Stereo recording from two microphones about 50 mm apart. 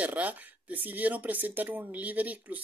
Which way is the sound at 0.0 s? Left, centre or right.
Right.